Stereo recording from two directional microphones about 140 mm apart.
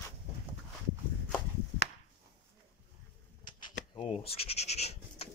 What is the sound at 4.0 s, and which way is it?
Scratch, 45° left (ahead or behind).